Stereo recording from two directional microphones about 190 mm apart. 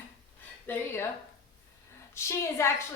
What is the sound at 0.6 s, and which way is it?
Speech, 10° left (ahead or behind).